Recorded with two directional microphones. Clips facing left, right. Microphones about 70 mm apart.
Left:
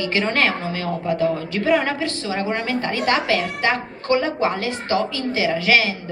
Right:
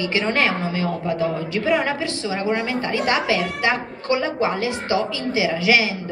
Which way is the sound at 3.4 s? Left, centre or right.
Left.